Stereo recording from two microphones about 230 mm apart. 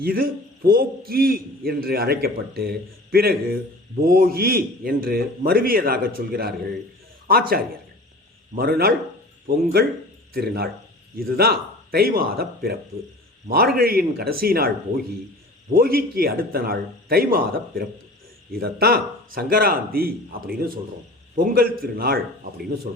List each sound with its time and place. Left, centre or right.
0.0 s a man's voice: right
13.7 s a man's voice: right
15.7 s a man's voice: right